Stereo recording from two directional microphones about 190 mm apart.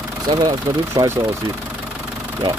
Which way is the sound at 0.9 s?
15° right (ahead or behind).